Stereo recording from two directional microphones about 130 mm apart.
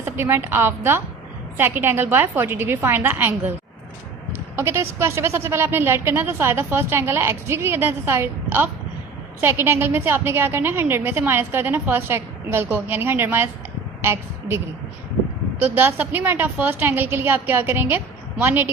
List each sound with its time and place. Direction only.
0.0 s a woman's voice: 20° right (ahead or behind)
15.6 s a woman's voice: 15° right (ahead or behind)